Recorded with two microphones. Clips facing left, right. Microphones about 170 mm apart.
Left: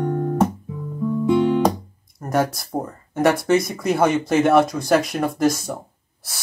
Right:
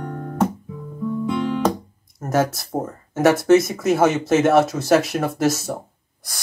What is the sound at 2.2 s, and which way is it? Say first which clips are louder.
Speech: right 1 dB; centre (ahead or behind).